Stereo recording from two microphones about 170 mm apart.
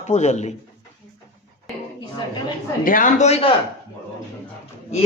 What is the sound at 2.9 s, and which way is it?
Speech, 50° left (ahead or behind).